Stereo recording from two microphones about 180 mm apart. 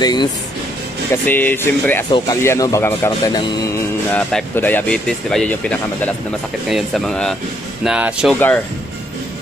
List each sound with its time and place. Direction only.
0.0 s speech: 25° left (ahead or behind)
1.2 s speech: 10° left (ahead or behind)
2.0 s speech: 25° left (ahead or behind)
2.4 s speech: 15° left (ahead or behind)
4.1 s speech: 5° left (ahead or behind)
8.4 s speech: 10° left (ahead or behind)